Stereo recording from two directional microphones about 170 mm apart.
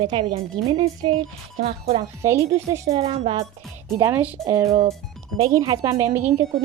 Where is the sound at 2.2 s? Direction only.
15° right (ahead or behind).